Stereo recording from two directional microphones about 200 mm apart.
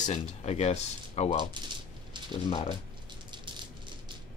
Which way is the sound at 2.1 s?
25° right (ahead or behind).